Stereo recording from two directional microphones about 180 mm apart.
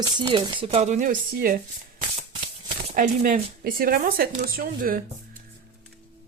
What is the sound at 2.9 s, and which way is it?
Speech, 45° right (ahead or behind).